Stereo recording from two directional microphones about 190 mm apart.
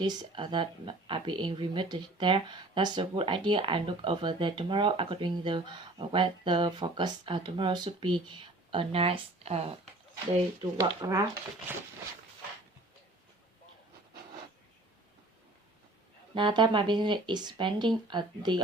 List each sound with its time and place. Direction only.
0.0 s speech: 20° right (ahead or behind)
10.6 s speech: 20° right (ahead or behind)
16.3 s speech: 25° right (ahead or behind)